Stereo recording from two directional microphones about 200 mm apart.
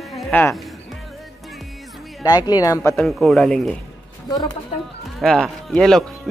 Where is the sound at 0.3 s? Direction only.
10° left (ahead or behind).